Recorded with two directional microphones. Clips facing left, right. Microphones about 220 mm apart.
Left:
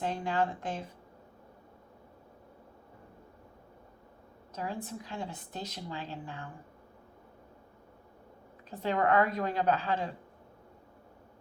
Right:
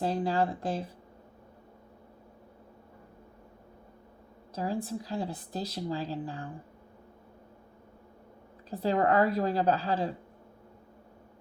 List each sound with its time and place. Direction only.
0.0 s a woman's voice: 35° right (ahead or behind)
4.5 s a woman's voice: 35° right (ahead or behind)
8.7 s a woman's voice: 35° right (ahead or behind)